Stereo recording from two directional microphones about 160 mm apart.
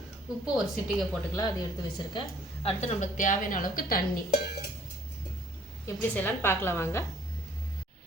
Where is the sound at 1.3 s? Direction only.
20° left (ahead or behind).